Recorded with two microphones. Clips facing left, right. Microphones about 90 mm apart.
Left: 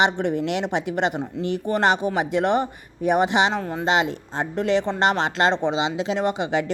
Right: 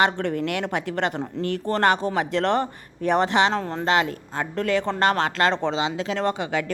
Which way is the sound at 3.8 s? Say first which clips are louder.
Left 1 dB; 20° left (ahead or behind).